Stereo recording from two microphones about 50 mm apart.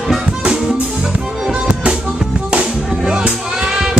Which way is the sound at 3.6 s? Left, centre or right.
Centre.